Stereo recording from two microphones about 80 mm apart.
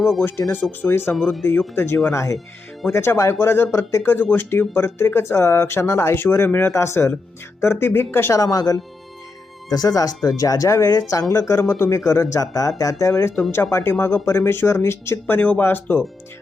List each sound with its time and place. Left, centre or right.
0.0 s speech: centre
0.5 s speech: left
1.1 s speech: centre
1.7 s speech: left
8.3 s speech: left
15.4 s speech: left